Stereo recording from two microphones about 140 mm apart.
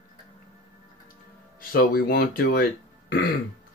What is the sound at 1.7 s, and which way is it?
Speech, 90° left.